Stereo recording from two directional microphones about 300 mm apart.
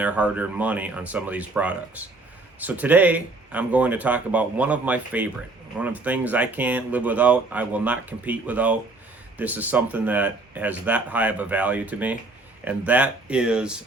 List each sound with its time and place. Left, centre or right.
0.0 s speech: centre